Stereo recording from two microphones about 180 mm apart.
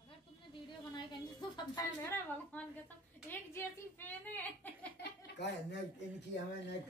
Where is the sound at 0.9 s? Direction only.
25° left (ahead or behind).